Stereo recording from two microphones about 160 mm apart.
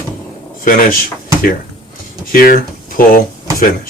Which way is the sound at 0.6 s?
60° left (ahead or behind).